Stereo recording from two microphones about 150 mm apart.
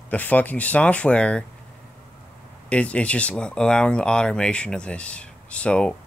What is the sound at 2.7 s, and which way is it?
Speech, 10° left (ahead or behind).